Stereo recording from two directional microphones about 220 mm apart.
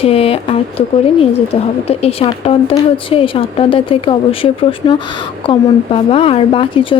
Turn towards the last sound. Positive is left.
turn(degrees=25)  # may be behind; listen again after turning